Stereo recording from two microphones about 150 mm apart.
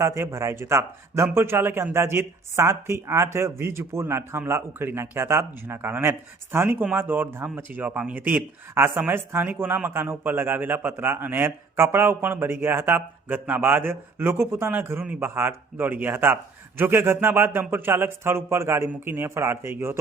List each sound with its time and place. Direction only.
0.0 s speech: 20° right (ahead or behind)